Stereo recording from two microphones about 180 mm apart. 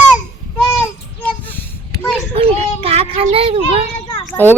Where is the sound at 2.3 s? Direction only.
35° right (ahead or behind).